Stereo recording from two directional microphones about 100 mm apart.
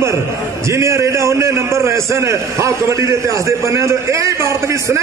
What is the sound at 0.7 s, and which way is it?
A man's voice, 30° right (ahead or behind).